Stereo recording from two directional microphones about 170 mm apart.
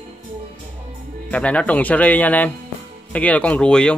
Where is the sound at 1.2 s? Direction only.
10° left (ahead or behind).